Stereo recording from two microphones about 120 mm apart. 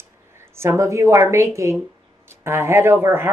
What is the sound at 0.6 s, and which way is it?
Speech, 25° right (ahead or behind).